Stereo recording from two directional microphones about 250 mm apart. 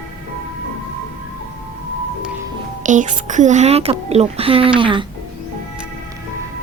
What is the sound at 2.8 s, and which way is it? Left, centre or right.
A woman's voice, right.